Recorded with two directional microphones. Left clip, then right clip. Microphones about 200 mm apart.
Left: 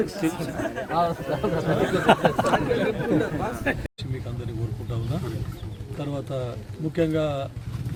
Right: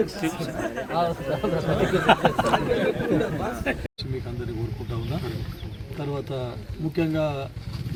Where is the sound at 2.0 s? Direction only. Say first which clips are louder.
Even; 35° left (ahead or behind).